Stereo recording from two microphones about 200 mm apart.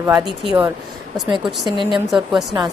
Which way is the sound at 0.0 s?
5° right (ahead or behind).